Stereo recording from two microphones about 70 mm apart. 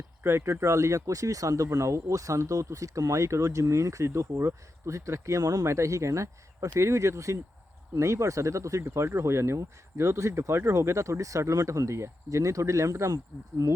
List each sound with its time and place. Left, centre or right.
0.2 s speech: right
5.6 s speech: right
13.6 s speech: right